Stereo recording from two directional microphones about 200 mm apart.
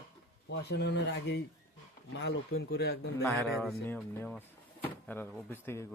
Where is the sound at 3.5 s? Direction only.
Centre (ahead or behind).